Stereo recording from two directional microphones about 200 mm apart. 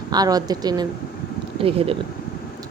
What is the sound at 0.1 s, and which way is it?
A woman's voice, 20° right (ahead or behind).